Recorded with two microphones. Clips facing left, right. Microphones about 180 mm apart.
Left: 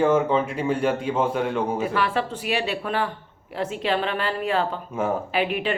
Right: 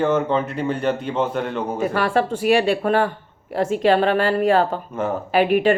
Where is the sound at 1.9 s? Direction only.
50° right (ahead or behind).